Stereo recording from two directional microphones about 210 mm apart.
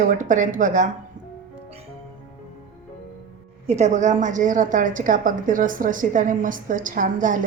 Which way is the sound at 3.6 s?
30° right (ahead or behind).